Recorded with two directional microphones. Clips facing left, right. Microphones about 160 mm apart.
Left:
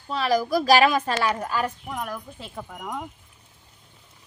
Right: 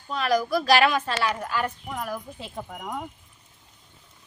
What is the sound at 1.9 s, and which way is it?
Speech, centre (ahead or behind).